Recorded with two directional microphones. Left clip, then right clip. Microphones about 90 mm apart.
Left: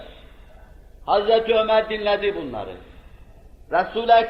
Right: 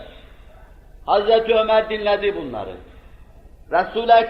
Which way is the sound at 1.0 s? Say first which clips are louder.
Right 2 dB; 35° left (ahead or behind).